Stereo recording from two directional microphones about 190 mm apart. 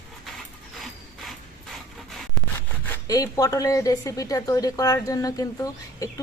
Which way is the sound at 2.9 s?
20° left (ahead or behind).